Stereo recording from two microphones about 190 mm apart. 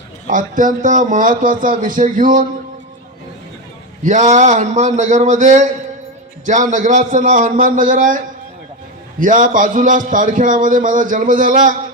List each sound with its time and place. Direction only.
0.3 s a man's voice: 45° right (ahead or behind)
4.0 s a man's voice: 40° right (ahead or behind)
9.2 s a man's voice: 45° right (ahead or behind)